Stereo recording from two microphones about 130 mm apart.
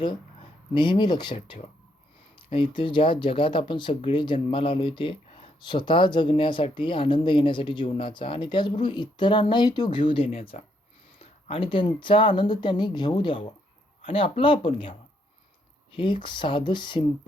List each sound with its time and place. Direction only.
0.0 s speech: 40° left (ahead or behind)
1.4 s speech: 50° left (ahead or behind)